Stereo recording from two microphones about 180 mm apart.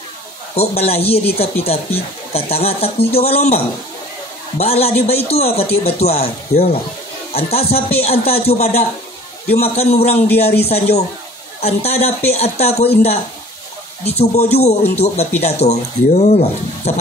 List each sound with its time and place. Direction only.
0.6 s speech: 35° left (ahead or behind)
6.5 s speech: 60° left (ahead or behind)
7.3 s speech: 35° left (ahead or behind)